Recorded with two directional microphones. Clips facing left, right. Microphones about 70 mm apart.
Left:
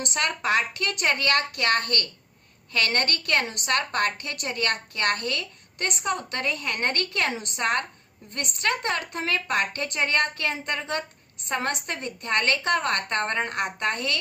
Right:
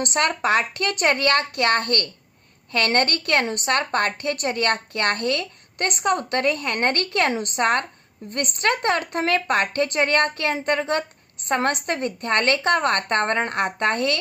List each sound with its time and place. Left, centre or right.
0.0 s a woman's voice: right